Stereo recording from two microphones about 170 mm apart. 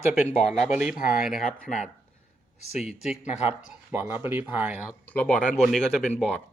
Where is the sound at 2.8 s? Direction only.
5° right (ahead or behind).